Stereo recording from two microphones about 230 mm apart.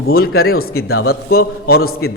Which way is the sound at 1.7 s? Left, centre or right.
Left.